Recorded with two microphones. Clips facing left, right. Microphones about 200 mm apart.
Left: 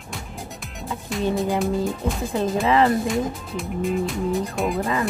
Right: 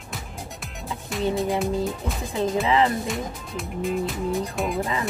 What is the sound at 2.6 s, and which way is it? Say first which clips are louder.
Speech: left 4 dB; 50° left (ahead or behind).